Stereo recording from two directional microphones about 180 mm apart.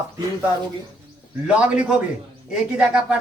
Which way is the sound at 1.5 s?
5° right (ahead or behind).